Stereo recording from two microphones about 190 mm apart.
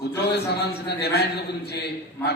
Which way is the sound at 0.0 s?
60° left (ahead or behind).